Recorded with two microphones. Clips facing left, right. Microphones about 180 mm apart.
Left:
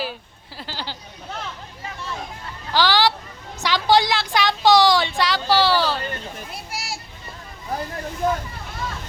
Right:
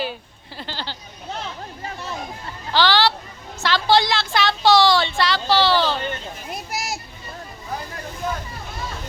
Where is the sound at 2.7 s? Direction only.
10° left (ahead or behind).